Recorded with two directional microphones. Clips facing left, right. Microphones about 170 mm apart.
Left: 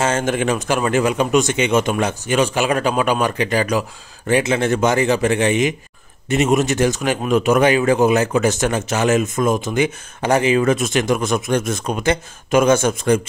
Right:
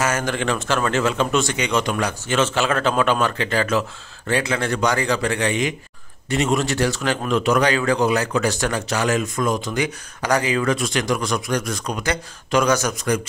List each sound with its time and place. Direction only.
0.0 s a man's voice: 25° left (ahead or behind)